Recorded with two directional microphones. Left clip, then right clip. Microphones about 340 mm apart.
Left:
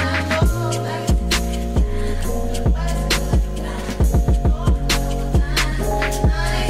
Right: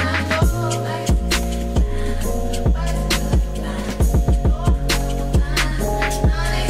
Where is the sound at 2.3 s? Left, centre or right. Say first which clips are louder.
Even; centre.